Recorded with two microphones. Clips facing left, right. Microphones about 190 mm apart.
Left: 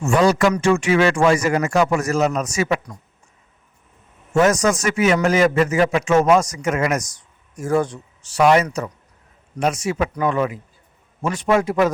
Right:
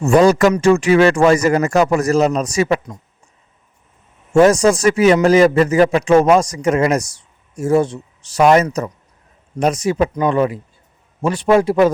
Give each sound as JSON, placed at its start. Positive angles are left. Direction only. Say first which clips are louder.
{"t": 0.0, "sound": "a man's voice", "louder": "right 5 dB", "side_deg": -40}
{"t": 4.4, "sound": "a man's voice", "louder": "right 5 dB", "side_deg": -30}
{"t": 8.3, "sound": "a man's voice", "louder": "right 3 dB", "side_deg": -40}